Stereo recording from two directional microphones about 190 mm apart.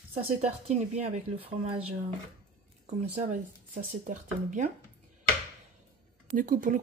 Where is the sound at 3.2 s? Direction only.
40° right (ahead or behind).